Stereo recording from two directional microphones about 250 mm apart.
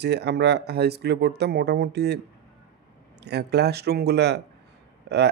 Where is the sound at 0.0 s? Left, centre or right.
Right.